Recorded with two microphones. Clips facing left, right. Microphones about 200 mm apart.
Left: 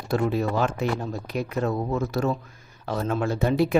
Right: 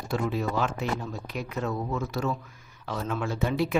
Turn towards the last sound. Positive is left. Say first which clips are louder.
# left 5 dB
turn(degrees=40)  # may be behind; listen again after turning